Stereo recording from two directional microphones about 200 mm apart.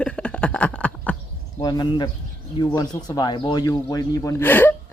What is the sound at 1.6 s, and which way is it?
Speech, 20° left (ahead or behind).